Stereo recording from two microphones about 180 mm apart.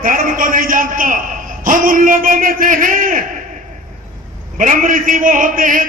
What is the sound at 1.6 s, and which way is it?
A man's voice, 50° right (ahead or behind).